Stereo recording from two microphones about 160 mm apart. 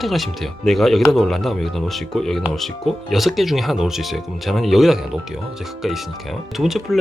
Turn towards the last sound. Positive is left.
turn(degrees=0)  # may be behind; listen again after turning